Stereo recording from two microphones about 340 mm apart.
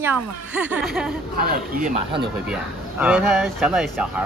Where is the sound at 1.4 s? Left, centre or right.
Right.